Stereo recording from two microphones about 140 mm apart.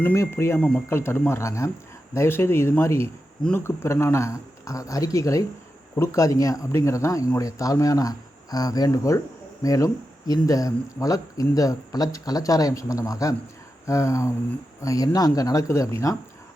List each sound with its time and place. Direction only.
0.0 s speech: 15° left (ahead or behind)